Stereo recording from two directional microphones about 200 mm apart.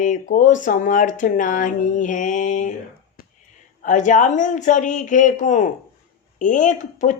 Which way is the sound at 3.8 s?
40° left (ahead or behind).